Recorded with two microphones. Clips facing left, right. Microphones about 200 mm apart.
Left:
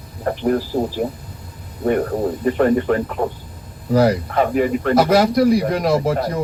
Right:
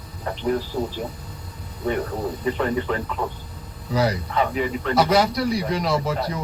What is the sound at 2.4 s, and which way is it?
Speech, 55° left (ahead or behind).